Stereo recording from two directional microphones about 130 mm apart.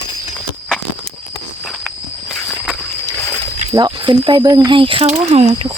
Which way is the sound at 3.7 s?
30° right (ahead or behind).